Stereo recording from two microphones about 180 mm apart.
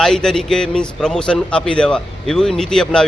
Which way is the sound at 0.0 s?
5° left (ahead or behind).